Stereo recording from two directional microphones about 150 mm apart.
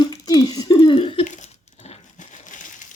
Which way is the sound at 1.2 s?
55° left (ahead or behind).